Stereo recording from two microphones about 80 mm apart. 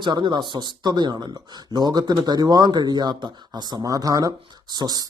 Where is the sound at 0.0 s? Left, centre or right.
Right.